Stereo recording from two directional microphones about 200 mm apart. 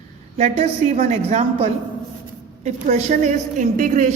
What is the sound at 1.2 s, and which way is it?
A woman's voice, 35° right (ahead or behind).